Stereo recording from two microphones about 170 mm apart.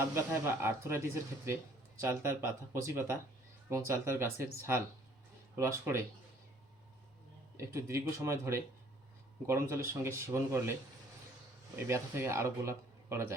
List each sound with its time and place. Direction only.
0.0 s speech: 15° right (ahead or behind)
7.5 s speech: 15° right (ahead or behind)
11.9 s speech: 15° right (ahead or behind)